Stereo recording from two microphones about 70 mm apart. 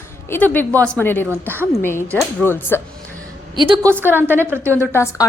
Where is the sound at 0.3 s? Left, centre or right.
Left.